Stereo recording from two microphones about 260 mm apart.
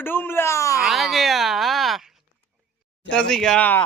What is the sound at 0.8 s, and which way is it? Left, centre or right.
Speech, centre.